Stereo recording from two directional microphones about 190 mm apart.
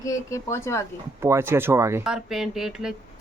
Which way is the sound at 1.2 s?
15° right (ahead or behind).